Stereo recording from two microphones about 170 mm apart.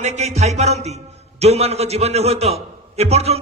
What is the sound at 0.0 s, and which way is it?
A man's voice, 40° right (ahead or behind).